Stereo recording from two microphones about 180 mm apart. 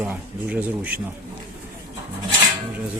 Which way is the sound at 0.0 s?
5° right (ahead or behind).